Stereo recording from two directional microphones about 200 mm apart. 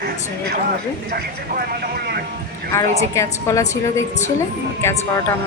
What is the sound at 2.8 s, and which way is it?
Speech, 30° right (ahead or behind).